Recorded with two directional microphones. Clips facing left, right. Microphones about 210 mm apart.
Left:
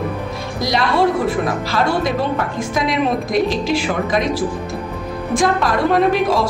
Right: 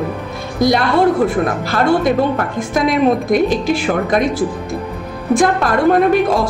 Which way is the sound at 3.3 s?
50° right (ahead or behind).